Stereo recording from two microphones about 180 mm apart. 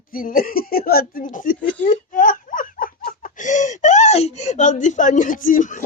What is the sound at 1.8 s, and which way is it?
Laughter, 50° left (ahead or behind).